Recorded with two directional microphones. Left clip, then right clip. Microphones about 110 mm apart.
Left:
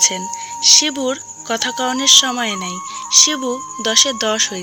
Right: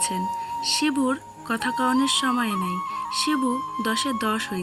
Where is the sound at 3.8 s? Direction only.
35° left (ahead or behind).